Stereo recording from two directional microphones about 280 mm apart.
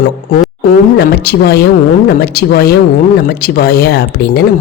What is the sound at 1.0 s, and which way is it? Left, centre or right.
Speech, left.